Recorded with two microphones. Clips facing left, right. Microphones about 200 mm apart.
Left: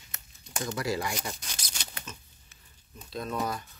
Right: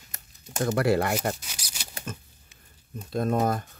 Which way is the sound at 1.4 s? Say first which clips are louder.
Left 1 dB; 10° right (ahead or behind).